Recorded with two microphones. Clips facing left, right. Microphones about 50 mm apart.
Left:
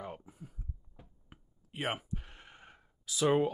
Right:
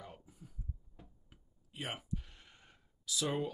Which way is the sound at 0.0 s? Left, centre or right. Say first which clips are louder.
Left 8 dB; left.